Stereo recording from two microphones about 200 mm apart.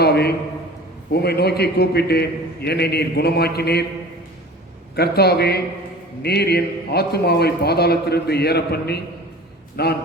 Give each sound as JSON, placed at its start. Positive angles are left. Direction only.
{"t": 0.0, "sound": "a sound", "side_deg": 55}
{"t": 1.1, "sound": "a man's voice", "side_deg": 55}
{"t": 4.9, "sound": "a man's voice", "side_deg": 50}